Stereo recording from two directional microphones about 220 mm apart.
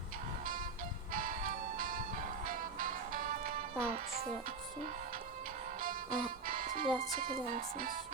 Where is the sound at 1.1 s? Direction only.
40° right (ahead or behind).